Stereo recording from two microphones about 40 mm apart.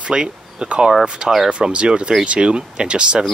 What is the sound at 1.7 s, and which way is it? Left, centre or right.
Speech, right.